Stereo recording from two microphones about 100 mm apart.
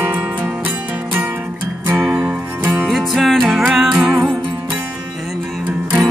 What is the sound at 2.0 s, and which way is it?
Music, 5° right (ahead or behind).